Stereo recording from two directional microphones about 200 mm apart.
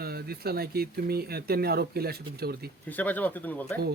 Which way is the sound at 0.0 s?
50° right (ahead or behind).